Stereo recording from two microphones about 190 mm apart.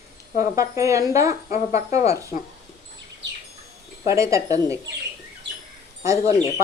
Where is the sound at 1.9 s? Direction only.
15° right (ahead or behind).